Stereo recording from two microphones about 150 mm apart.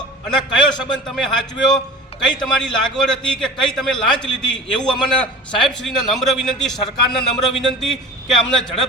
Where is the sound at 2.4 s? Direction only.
5° left (ahead or behind).